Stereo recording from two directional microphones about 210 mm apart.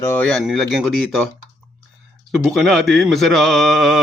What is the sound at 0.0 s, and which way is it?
Speech, 10° left (ahead or behind).